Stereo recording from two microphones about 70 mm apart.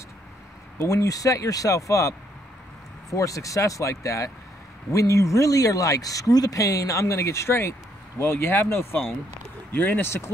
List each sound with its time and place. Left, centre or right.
0.8 s speech: left